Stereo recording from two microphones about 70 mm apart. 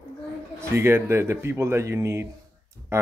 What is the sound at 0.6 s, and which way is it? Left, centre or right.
Speech, right.